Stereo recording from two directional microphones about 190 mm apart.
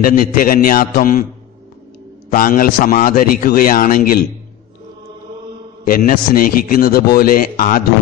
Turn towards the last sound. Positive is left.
turn(degrees=50)  # may be behind; listen again after turning